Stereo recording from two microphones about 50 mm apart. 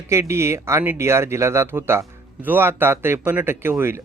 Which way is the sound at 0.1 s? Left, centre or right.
Right.